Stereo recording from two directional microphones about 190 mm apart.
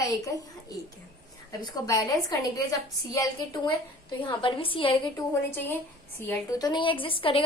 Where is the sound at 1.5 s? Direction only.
20° left (ahead or behind).